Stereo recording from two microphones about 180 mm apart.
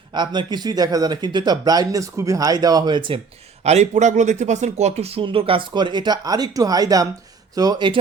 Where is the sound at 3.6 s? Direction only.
40° right (ahead or behind).